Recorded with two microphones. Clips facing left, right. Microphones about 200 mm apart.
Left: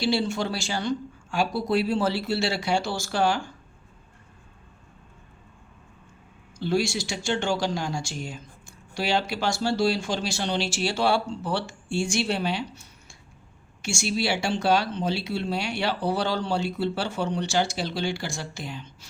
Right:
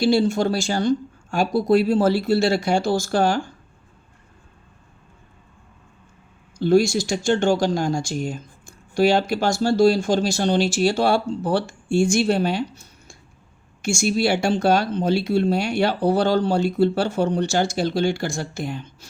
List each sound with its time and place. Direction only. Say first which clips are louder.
0.0 s speech: right 7 dB; 45° right (ahead or behind)
6.6 s speech: right 8 dB; 45° right (ahead or behind)
13.8 s speech: right 7 dB; 45° right (ahead or behind)